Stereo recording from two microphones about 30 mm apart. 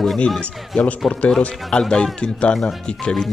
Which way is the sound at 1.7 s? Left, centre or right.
Left.